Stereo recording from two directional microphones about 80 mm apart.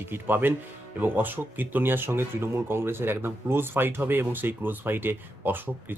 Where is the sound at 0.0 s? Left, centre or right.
Right.